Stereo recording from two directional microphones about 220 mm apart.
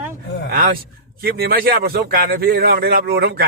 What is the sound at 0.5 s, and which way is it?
A man's voice, 40° right (ahead or behind).